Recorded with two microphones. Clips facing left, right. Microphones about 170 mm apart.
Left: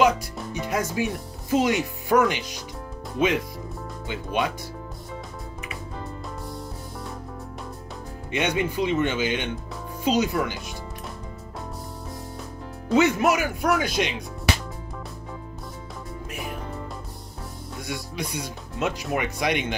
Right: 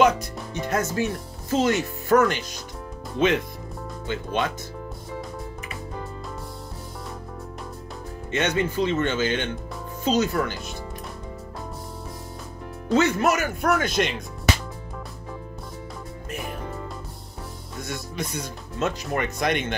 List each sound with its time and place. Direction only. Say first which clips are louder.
0.0 s speech: right 1 dB; 10° left (ahead or behind)
8.3 s speech: right 1 dB; 15° left (ahead or behind)
12.9 s speech: left 1 dB; 15° left (ahead or behind)
16.3 s music: right 2 dB; centre (ahead or behind)
17.8 s speech: even; 10° left (ahead or behind)